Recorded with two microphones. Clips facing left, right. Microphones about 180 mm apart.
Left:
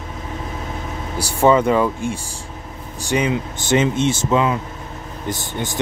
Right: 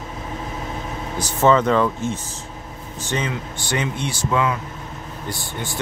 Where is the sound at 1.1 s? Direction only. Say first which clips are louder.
Left 2 dB; 10° left (ahead or behind).